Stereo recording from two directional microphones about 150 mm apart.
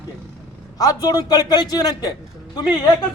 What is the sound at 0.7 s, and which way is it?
A man's voice, 25° left (ahead or behind).